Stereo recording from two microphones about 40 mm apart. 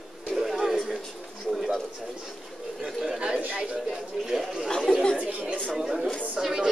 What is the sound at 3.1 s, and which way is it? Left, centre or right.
Speech, right.